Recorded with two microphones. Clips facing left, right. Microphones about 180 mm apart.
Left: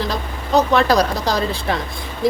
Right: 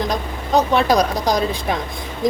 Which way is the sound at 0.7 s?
15° right (ahead or behind).